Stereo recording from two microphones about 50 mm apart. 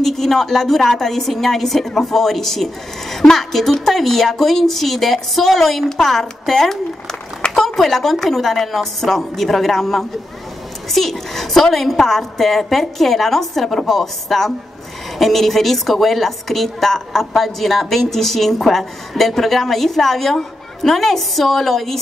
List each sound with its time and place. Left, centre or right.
0.0 s a woman's voice: centre